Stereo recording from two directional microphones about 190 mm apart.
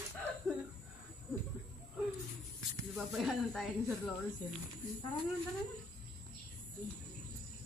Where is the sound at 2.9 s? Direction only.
Centre (ahead or behind).